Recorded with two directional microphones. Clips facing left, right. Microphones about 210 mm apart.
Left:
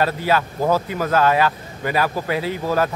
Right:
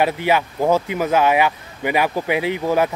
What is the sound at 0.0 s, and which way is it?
Speech, 15° right (ahead or behind).